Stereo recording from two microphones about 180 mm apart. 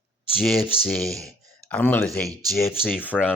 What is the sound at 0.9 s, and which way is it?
Speech, centre (ahead or behind).